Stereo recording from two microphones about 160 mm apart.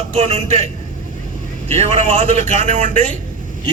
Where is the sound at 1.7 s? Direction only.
45° right (ahead or behind).